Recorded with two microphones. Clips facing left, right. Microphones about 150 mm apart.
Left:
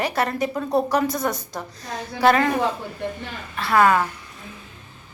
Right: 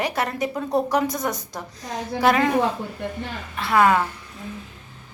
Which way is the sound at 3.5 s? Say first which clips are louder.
Left 1 dB; 15° right (ahead or behind).